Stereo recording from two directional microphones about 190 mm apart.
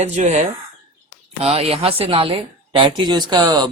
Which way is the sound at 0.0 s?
35° right (ahead or behind).